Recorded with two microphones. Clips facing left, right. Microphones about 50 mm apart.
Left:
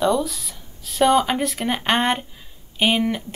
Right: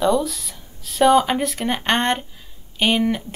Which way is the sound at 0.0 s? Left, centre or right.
Centre.